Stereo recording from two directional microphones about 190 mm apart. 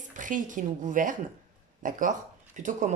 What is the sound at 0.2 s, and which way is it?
A woman's voice, 45° right (ahead or behind).